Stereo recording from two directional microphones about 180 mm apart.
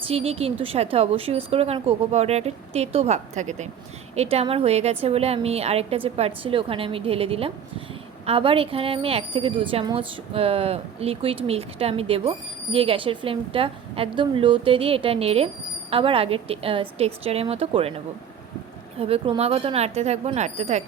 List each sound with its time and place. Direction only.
0.0 s speech: 35° right (ahead or behind)